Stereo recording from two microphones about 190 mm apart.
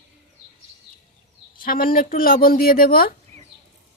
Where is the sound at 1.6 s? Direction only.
50° left (ahead or behind).